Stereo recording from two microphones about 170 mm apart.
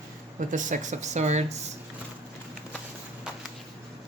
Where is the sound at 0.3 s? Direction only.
50° right (ahead or behind).